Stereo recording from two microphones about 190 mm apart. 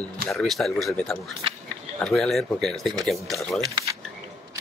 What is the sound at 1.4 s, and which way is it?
Speech, 30° right (ahead or behind).